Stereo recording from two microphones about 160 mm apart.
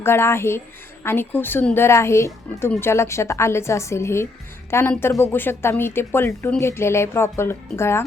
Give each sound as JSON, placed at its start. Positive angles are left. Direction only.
{"t": 0.0, "sound": "speech", "side_deg": 15}